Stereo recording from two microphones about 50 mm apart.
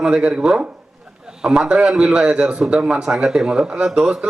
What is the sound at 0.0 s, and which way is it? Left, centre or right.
Speech, right.